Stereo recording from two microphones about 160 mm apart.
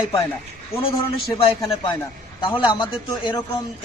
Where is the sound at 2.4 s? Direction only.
30° left (ahead or behind).